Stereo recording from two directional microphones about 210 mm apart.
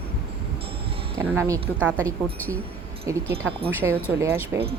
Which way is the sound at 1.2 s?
15° right (ahead or behind).